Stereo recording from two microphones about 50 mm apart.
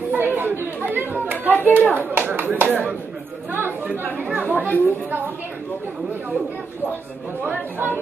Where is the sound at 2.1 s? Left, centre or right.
Right.